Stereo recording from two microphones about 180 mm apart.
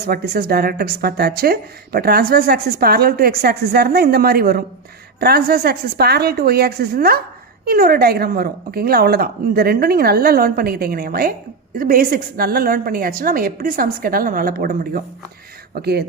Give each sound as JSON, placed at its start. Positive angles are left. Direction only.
{"t": 0.0, "sound": "a woman's voice", "side_deg": -55}